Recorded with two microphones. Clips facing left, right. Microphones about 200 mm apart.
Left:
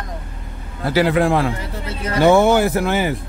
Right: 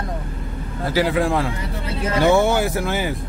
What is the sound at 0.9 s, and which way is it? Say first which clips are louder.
Speech: left 3 dB; 65° left (ahead or behind).